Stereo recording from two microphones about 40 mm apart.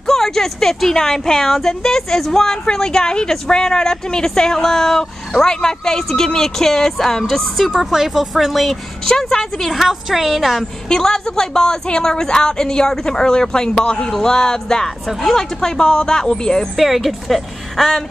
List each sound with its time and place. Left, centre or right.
0.0 s a woman's voice: centre
7.9 s speech: centre
9.0 s a woman's voice: centre
9.7 s a woman's voice: centre
10.9 s a woman's voice: centre
16.7 s a woman's voice: centre